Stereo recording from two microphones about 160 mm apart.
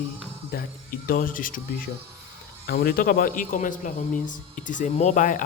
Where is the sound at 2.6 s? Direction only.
70° left (ahead or behind).